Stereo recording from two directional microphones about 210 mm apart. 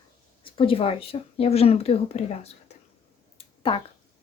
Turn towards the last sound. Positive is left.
turn(degrees=25)  # may be behind; listen again after turning